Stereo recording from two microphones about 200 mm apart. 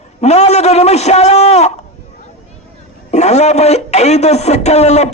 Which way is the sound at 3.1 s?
35° left (ahead or behind).